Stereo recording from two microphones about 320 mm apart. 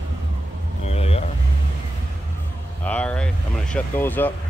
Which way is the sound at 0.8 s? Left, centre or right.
Centre.